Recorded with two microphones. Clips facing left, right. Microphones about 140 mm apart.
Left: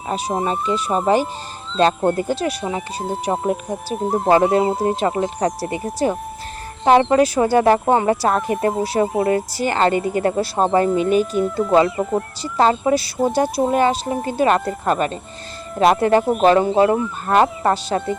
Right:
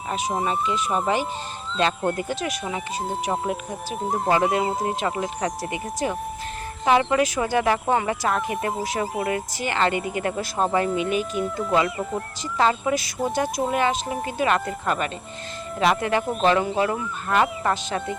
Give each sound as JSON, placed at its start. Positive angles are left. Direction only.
{"t": 0.1, "sound": "speech", "side_deg": 35}
{"t": 3.9, "sound": "speech", "side_deg": 0}
{"t": 4.3, "sound": "speech", "side_deg": 35}